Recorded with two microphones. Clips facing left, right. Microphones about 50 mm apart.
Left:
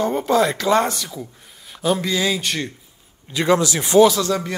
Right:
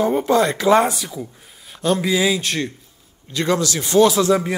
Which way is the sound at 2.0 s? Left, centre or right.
Centre.